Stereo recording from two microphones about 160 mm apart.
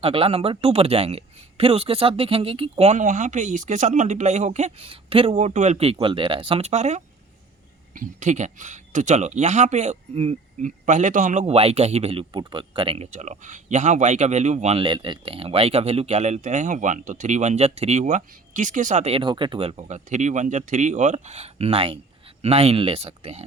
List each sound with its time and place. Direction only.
0.0 s speech: 35° right (ahead or behind)
13.1 s speech: 50° right (ahead or behind)